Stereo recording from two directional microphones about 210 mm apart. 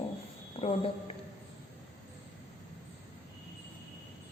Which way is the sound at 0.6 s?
25° left (ahead or behind).